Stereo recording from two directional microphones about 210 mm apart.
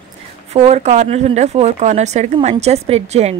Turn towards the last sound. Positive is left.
turn(degrees=-30)  # may be behind; listen again after turning